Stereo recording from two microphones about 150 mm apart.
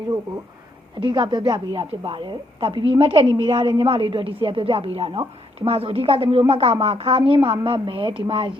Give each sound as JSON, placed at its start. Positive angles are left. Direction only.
{"t": 0.9, "sound": "a woman's voice", "side_deg": -35}